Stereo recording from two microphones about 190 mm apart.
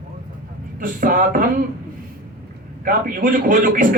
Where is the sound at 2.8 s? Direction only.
45° right (ahead or behind).